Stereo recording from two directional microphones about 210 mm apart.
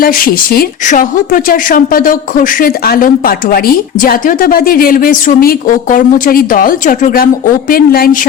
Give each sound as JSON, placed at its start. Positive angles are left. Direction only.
{"t": 0.0, "sound": "speech", "side_deg": 45}